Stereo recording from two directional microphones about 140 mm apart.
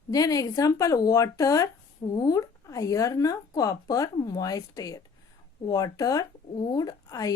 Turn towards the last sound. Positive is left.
turn(degrees=25)  # may be behind; listen again after turning